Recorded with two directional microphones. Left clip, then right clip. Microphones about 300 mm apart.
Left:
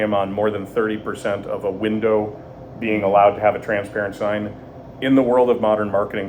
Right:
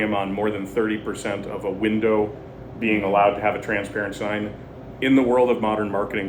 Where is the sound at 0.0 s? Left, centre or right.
Centre.